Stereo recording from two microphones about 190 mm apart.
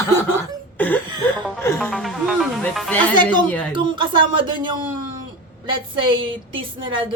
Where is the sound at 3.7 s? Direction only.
25° right (ahead or behind).